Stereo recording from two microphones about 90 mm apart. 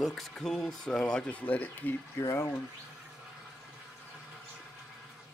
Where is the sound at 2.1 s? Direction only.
30° left (ahead or behind).